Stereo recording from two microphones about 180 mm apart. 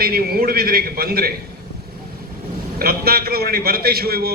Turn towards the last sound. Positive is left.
turn(degrees=-60)  # may be behind; listen again after turning